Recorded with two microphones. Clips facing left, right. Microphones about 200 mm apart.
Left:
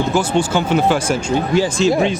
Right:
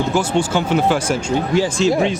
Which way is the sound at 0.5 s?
25° left (ahead or behind).